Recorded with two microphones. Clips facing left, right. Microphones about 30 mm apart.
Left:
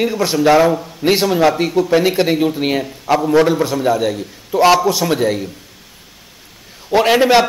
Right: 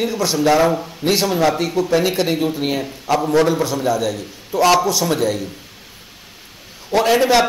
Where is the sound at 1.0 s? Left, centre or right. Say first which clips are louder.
Left 4 dB; centre.